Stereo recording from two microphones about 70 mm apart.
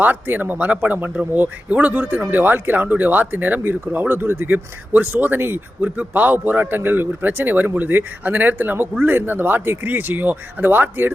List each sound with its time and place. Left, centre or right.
0.0 s speech: right